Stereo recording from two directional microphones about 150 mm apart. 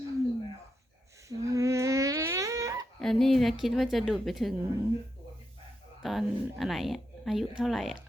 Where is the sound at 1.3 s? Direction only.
20° right (ahead or behind).